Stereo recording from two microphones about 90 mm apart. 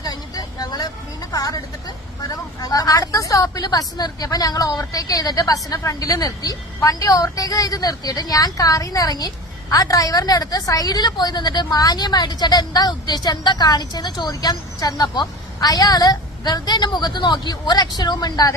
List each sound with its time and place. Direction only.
0.0 s vehicle: 45° left (ahead or behind)
1.3 s a sound: 45° left (ahead or behind)
2.2 s speech: 45° left (ahead or behind)